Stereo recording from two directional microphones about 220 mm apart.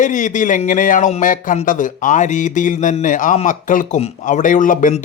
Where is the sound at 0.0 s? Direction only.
35° left (ahead or behind).